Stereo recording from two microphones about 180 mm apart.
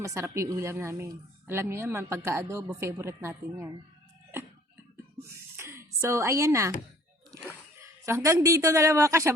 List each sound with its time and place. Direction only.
0.0 s a woman's voice: 15° right (ahead or behind)
4.9 s a sound: 15° right (ahead or behind)
7.8 s a woman's voice: 15° right (ahead or behind)